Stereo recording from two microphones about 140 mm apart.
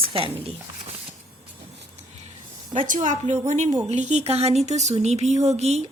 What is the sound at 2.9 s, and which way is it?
A woman's voice, 60° right (ahead or behind).